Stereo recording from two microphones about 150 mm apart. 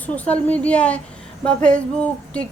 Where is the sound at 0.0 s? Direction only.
10° left (ahead or behind).